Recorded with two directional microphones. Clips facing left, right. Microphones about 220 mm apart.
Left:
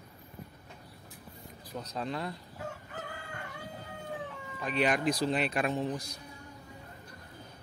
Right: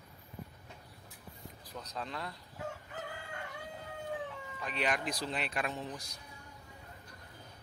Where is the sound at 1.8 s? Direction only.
30° left (ahead or behind).